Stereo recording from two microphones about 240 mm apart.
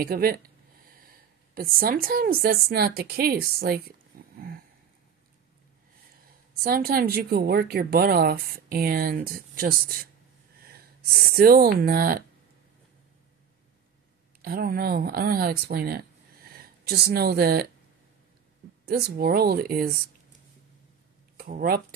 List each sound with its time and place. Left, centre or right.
0.0 s a woman's voice: right
4.1 s a sound: right
6.6 s a woman's voice: right
14.4 s speech: right
18.9 s a woman's voice: right
21.4 s speech: right